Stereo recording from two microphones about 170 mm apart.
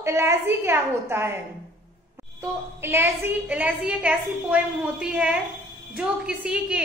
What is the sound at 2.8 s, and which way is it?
A woman's voice, 15° right (ahead or behind).